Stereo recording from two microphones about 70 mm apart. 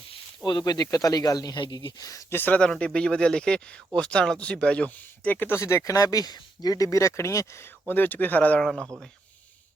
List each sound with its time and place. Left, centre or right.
0.4 s speech: left
2.3 s speech: left
2.6 s speech: centre
5.3 s speech: left
5.8 s speech: left
7.9 s speech: left
8.6 s speech: centre